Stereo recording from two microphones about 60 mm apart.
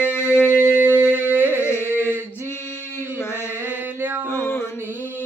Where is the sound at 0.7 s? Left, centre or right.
Right.